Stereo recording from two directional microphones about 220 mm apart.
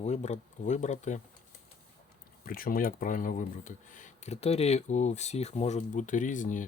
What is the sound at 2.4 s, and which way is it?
Speech, 40° left (ahead or behind).